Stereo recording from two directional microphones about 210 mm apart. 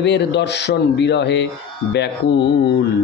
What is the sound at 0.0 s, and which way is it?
Speech, 55° left (ahead or behind).